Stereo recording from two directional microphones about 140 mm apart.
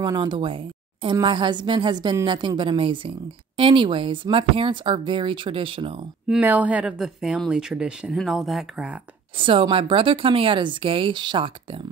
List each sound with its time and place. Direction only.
0.0 s speech: 30° right (ahead or behind)
6.2 s speech: 10° right (ahead or behind)
9.4 s speech: 35° right (ahead or behind)